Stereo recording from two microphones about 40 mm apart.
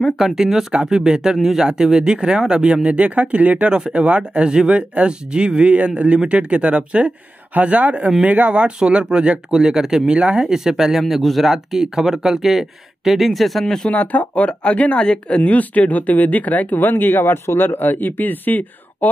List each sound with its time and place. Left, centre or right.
0.2 s speech: centre; by 3.7 s right
3.7 s speech: right
9.5 s speech: centre
10.5 s speech: centre
13.8 s speech: left